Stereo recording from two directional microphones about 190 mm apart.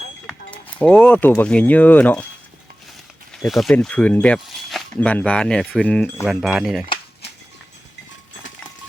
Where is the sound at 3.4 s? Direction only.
Centre (ahead or behind).